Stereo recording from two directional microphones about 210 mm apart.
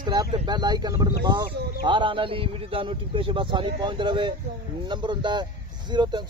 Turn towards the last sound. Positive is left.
turn(degrees=-20)  # may be behind; listen again after turning